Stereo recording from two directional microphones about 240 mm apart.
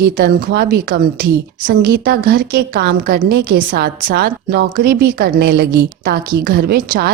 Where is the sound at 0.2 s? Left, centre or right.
Right.